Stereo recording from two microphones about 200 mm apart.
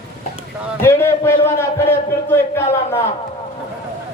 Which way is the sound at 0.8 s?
10° left (ahead or behind).